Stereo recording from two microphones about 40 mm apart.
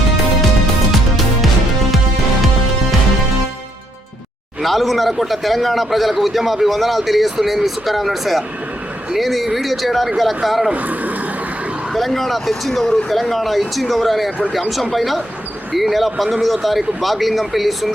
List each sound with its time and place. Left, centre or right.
0.9 s music: centre
4.6 s a man's voice: centre
10.8 s speech: right
11.9 s a man's voice: centre